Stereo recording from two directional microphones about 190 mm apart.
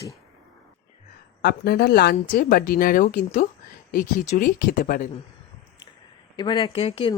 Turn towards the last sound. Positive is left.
turn(degrees=30)  # may be behind; listen again after turning